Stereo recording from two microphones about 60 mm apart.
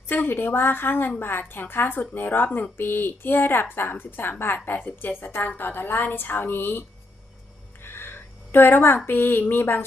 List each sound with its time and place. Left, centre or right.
0.1 s a woman's voice: left
7.9 s a sound: left
9.0 s speech: left